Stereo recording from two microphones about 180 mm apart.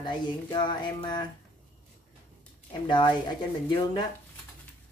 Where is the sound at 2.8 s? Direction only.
25° left (ahead or behind).